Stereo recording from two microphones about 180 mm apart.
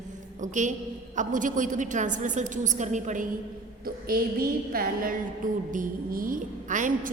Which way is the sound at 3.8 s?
55° right (ahead or behind).